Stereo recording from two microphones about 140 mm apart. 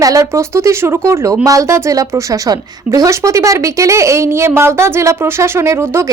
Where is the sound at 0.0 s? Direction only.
25° right (ahead or behind).